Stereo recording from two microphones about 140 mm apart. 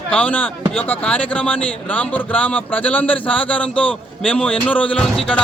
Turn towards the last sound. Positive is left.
turn(degrees=5)  # may be behind; listen again after turning